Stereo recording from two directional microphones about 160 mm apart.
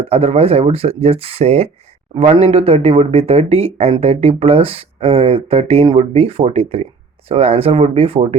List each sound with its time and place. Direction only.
0.0 s speech: 40° right (ahead or behind)